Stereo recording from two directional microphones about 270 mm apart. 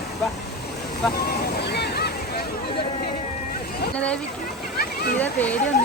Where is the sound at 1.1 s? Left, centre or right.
Left.